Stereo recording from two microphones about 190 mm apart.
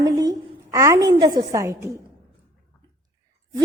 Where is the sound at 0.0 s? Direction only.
20° right (ahead or behind).